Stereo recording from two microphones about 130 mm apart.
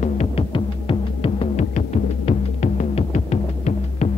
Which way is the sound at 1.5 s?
60° left (ahead or behind).